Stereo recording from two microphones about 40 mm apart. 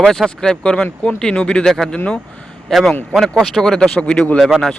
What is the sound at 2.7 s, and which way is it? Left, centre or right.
Speech, centre.